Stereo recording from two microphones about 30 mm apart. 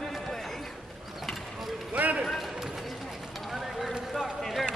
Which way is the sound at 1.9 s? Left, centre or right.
Right.